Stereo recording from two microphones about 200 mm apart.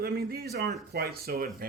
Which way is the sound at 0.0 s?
50° right (ahead or behind).